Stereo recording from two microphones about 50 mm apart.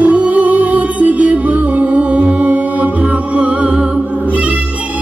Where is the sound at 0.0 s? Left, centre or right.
Right.